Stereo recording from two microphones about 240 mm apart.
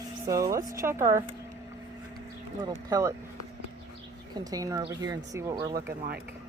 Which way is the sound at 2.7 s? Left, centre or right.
Centre.